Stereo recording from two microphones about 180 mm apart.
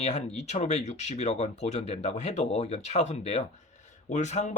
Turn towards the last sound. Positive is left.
turn(degrees=40)  # may be behind; listen again after turning